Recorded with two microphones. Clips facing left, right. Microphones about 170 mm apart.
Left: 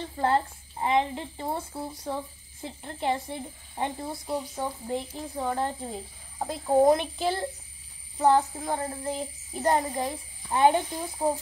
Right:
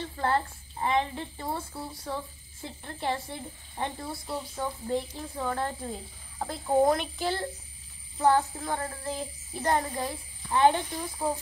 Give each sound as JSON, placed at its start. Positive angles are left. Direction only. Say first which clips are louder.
{"t": 0.1, "sound": "a child's voice", "louder": "left 4 dB", "side_deg": 20}
{"t": 6.6, "sound": "speech", "louder": "left 2 dB", "side_deg": 0}
{"t": 6.9, "sound": "a child's voice", "louder": "left 4 dB", "side_deg": 20}